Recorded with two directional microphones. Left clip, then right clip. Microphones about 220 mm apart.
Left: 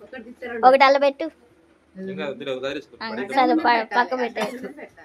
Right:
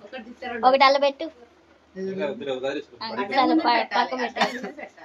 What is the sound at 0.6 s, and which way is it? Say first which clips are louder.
A woman's voice: left 3 dB; 35° left (ahead or behind).